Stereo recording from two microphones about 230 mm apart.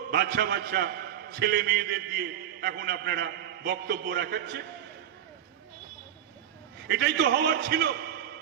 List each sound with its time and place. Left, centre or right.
0.1 s a man's voice: right
6.8 s a man's voice: right